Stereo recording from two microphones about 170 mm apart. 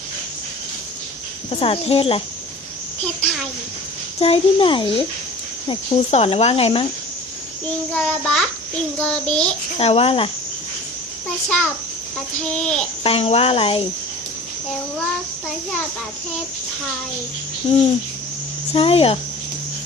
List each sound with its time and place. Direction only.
1.5 s speech: 35° left (ahead or behind)
4.2 s speech: 35° left (ahead or behind)
7.9 s a child's voice: 5° left (ahead or behind)
9.7 s speech: 35° left (ahead or behind)
11.4 s a child's voice: 10° left (ahead or behind)
13.0 s speech: 35° left (ahead or behind)
18.7 s speech: 35° left (ahead or behind)